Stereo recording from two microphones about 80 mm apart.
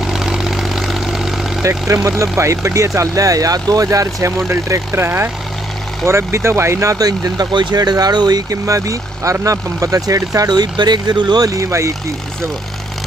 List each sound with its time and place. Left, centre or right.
0.0 s vehicle: centre
1.6 s speech: right